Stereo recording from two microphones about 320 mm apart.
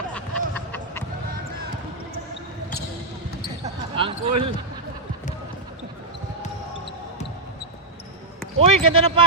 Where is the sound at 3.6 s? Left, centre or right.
Centre.